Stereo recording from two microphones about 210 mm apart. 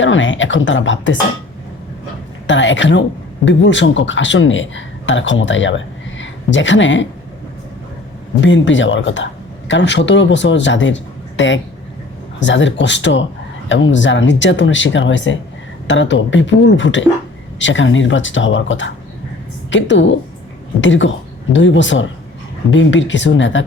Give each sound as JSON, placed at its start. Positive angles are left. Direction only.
{"t": 0.0, "sound": "speech", "side_deg": 65}
{"t": 2.5, "sound": "a man's voice", "side_deg": 60}
{"t": 8.4, "sound": "speech", "side_deg": 65}